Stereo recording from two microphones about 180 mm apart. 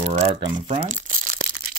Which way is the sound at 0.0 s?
40° right (ahead or behind).